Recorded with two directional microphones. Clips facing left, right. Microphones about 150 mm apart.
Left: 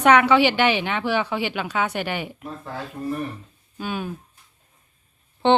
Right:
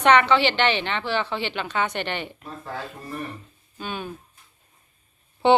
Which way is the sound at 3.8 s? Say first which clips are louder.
Left 3 dB; 5° left (ahead or behind).